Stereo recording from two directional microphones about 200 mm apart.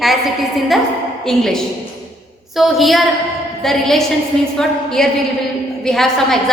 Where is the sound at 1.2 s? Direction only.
Centre (ahead or behind).